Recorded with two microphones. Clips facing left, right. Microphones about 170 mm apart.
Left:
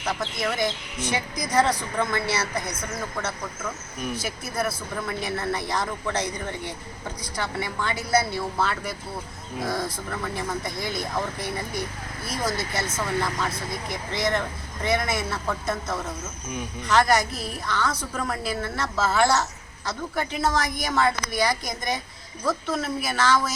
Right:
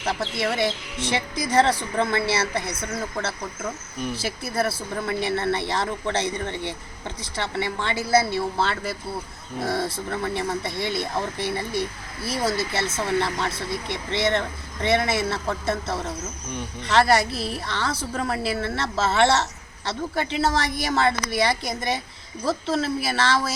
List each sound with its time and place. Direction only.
0.0 s speech: 30° right (ahead or behind)